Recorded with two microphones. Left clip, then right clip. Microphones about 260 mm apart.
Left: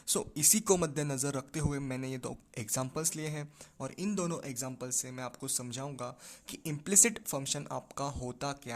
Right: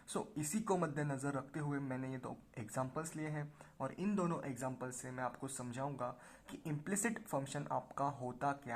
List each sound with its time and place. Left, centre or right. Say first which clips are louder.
0.1 s a man's voice: left 11 dB; left